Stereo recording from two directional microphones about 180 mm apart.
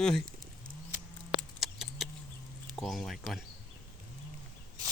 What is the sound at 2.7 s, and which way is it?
Speech, centre (ahead or behind).